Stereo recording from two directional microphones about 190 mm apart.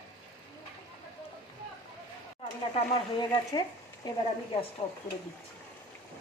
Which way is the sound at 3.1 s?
20° left (ahead or behind).